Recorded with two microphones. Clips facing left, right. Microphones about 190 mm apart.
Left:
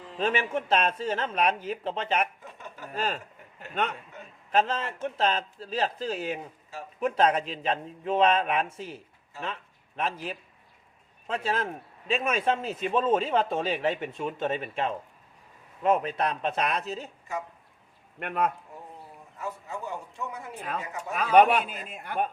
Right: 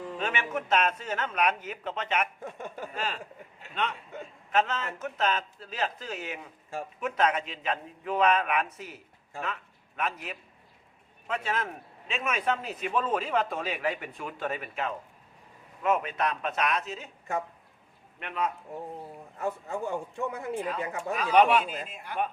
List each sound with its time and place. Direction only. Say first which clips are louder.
0.2 s a man's voice: left 6 dB; 30° left (ahead or behind)
2.4 s a sound: right 6 dB; 50° right (ahead or behind)
2.9 s a man's voice: left 6 dB; 40° left (ahead or behind)
4.5 s a man's voice: left 2 dB; 30° left (ahead or behind)
18.2 s a man's voice: left 4 dB; 50° left (ahead or behind)
19.4 s a man's voice: right 4 dB; 50° right (ahead or behind)
21.2 s a man's voice: left 2 dB; 50° left (ahead or behind)